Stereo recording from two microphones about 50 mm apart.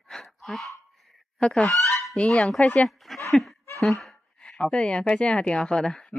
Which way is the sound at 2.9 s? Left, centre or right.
Centre.